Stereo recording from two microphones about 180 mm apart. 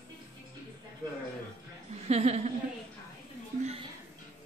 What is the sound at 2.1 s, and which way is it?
Speech, 35° right (ahead or behind).